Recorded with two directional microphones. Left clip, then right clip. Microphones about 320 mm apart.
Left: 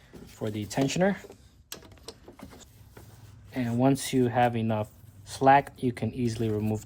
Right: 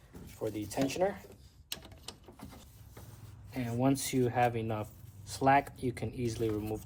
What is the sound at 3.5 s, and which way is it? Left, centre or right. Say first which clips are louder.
Speech: left 6 dB; left.